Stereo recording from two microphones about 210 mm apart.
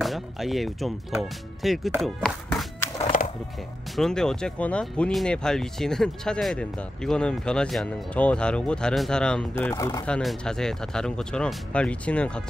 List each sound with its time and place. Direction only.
0.0 s speech: centre (ahead or behind)
3.0 s music: 40° left (ahead or behind)
3.9 s speech: centre (ahead or behind)
10.0 s speech: 5° left (ahead or behind)